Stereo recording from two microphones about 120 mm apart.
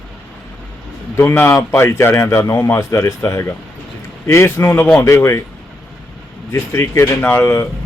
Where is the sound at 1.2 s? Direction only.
20° left (ahead or behind).